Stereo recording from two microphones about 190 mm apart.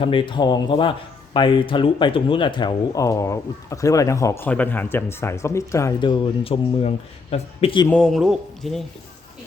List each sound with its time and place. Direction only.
0.0 s speech: 25° left (ahead or behind)
7.9 s a man's voice: 5° left (ahead or behind)